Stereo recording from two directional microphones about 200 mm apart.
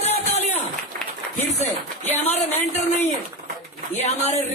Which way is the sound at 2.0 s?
10° left (ahead or behind).